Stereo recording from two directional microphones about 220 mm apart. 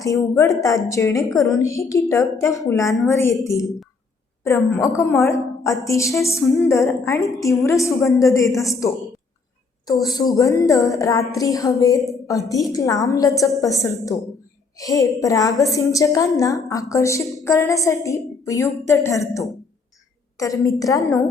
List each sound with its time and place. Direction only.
0.0 s music: 15° left (ahead or behind)
4.8 s music: 15° left (ahead or behind)
9.8 s music: 15° left (ahead or behind)